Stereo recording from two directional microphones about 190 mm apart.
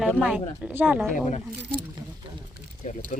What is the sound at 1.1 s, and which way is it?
Speech, 35° left (ahead or behind).